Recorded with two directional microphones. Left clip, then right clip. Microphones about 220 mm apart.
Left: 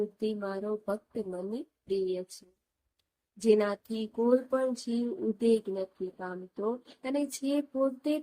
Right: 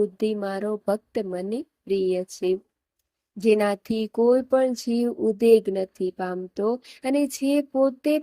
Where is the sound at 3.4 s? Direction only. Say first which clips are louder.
Right 5 dB; 25° right (ahead or behind).